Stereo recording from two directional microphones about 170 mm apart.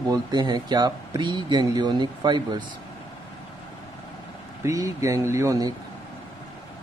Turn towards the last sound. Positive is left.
turn(degrees=-20)  # may be behind; listen again after turning